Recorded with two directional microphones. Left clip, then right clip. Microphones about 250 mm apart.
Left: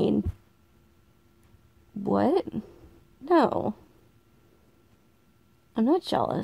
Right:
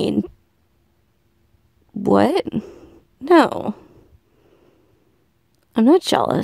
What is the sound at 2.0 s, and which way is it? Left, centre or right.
Speech, right.